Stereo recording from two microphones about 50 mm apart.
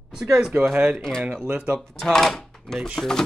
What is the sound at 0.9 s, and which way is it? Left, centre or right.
Speech, centre.